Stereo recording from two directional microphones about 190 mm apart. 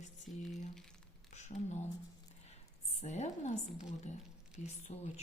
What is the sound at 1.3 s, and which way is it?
Speech, 35° left (ahead or behind).